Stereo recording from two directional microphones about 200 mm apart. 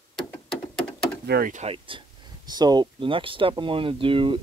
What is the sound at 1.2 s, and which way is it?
Speech, 50° right (ahead or behind).